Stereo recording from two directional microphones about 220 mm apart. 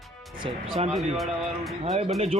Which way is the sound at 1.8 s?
30° right (ahead or behind).